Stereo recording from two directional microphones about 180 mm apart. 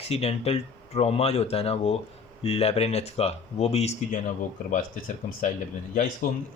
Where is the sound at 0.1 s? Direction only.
35° left (ahead or behind).